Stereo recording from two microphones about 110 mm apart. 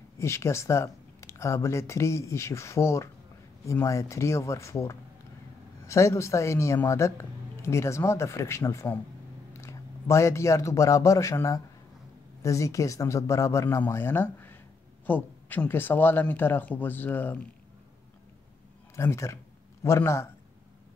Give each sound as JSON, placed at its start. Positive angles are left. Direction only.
{"t": 0.2, "sound": "a man's voice", "side_deg": 25}
{"t": 18.9, "sound": "speech", "side_deg": 25}